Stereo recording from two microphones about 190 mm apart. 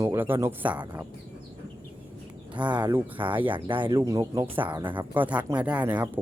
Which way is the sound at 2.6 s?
5° right (ahead or behind).